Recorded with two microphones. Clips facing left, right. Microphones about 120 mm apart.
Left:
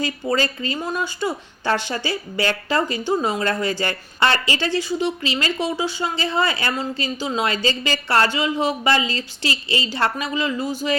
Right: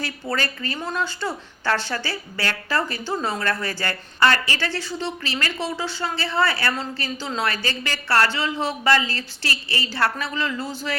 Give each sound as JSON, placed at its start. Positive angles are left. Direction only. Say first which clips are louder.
{"t": 0.0, "sound": "speech", "louder": "left 5 dB", "side_deg": 20}